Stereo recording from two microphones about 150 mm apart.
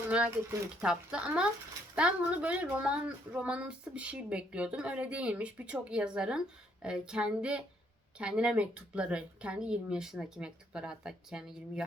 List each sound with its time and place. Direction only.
0.8 s a woman's voice: 5° right (ahead or behind)